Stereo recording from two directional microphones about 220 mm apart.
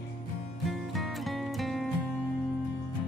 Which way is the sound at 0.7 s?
Centre (ahead or behind).